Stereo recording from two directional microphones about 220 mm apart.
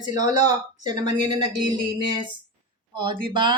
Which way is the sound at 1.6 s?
20° right (ahead or behind).